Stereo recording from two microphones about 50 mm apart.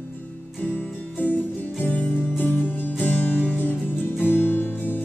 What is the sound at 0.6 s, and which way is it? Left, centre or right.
Music, left.